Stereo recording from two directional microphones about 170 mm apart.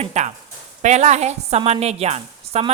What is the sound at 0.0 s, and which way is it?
A woman's voice, 40° right (ahead or behind).